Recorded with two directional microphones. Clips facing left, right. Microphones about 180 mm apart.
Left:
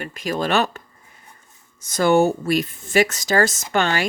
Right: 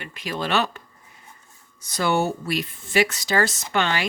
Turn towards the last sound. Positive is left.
turn(degrees=45)  # may be behind; listen again after turning